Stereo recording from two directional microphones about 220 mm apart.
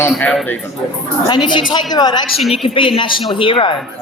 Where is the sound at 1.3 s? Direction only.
20° left (ahead or behind).